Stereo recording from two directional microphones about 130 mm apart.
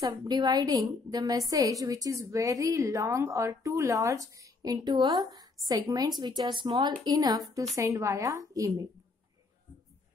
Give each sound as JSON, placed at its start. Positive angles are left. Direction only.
{"t": 0.0, "sound": "a woman's voice", "side_deg": -30}